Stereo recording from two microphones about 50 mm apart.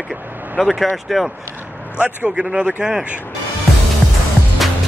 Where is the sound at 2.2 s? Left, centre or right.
Right.